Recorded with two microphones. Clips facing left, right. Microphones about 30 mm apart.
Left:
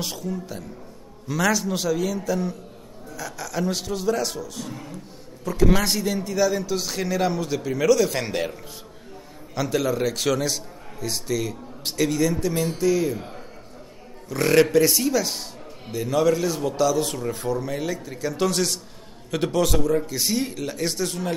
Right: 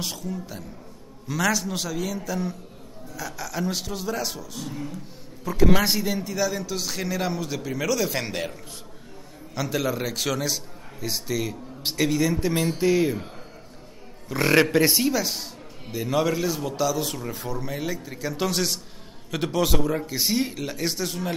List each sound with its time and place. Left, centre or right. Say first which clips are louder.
0.0 s a man's voice: left 2 dB; centre
9.6 s a man's voice: left 3 dB; centre
12.4 s speech: even; right
14.3 s a man's voice: left 2 dB; centre
15.1 s a man's voice: left 2 dB; centre